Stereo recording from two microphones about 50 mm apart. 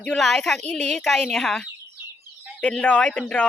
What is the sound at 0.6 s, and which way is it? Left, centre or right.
Speech, left.